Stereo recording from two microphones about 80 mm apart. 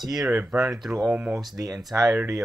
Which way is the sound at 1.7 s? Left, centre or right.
Centre.